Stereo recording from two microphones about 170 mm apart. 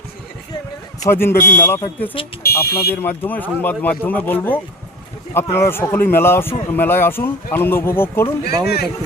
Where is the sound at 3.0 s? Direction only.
10° left (ahead or behind).